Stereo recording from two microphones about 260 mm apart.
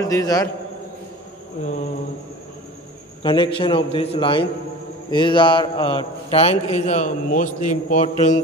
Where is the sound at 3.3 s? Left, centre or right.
Centre.